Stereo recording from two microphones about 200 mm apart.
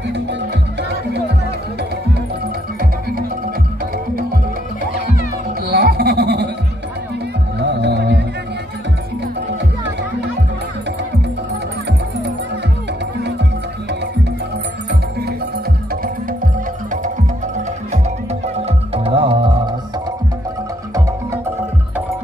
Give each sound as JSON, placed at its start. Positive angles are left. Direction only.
{"t": 5.7, "sound": "a sound", "side_deg": -50}
{"t": 7.5, "sound": "music", "side_deg": -55}
{"t": 19.0, "sound": "music", "side_deg": -25}